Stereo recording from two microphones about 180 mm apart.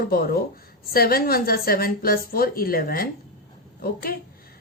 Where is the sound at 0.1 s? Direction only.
55° left (ahead or behind).